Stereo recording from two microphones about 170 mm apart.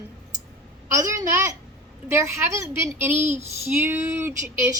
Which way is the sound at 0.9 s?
20° right (ahead or behind).